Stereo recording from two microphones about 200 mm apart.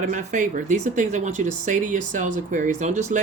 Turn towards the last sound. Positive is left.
turn(degrees=-35)  # may be behind; listen again after turning